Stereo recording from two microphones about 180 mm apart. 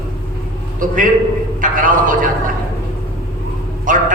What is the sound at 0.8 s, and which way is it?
A man's voice, 50° right (ahead or behind).